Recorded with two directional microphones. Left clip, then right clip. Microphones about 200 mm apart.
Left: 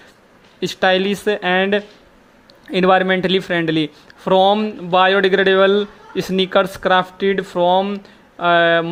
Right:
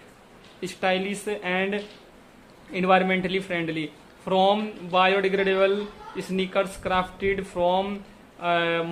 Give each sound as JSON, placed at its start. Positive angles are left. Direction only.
{"t": 0.6, "sound": "speech", "side_deg": 40}